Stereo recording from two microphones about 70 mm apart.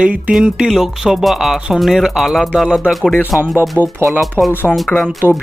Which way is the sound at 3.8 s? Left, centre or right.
Right.